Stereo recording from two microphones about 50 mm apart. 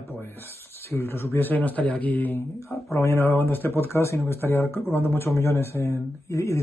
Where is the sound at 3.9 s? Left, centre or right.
Left.